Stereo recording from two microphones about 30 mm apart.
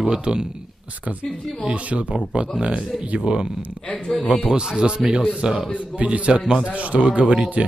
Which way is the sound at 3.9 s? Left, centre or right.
Left.